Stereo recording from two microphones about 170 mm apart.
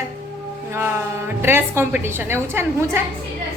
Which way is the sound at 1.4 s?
15° right (ahead or behind).